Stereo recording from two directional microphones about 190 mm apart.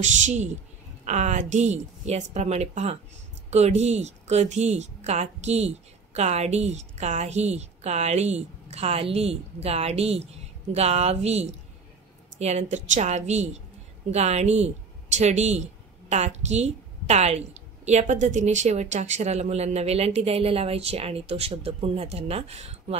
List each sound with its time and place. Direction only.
0.0 s a woman's voice: 40° right (ahead or behind)